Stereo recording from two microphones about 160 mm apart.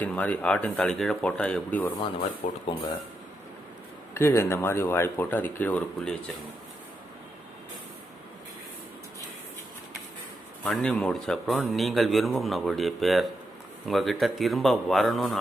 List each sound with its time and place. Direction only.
0.0 s speech: 10° left (ahead or behind)
2.4 s speech: 50° left (ahead or behind)
4.1 s speech: 15° left (ahead or behind)
10.6 s speech: 5° left (ahead or behind)